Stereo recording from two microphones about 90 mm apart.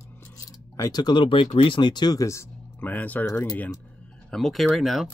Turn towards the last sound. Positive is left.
turn(degrees=0)  # may be behind; listen again after turning